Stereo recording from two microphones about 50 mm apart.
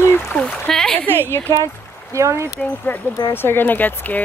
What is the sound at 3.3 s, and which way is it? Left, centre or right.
Speech, left.